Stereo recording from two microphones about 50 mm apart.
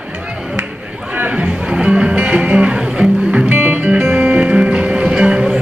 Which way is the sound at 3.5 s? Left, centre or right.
Right.